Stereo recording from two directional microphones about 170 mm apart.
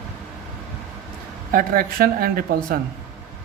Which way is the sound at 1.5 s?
55° right (ahead or behind).